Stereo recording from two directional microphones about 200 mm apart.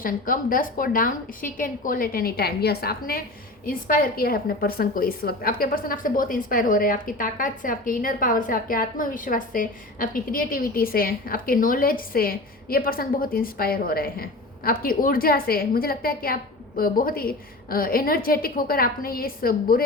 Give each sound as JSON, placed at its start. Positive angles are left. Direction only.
{"t": 0.0, "sound": "a woman's voice", "side_deg": 45}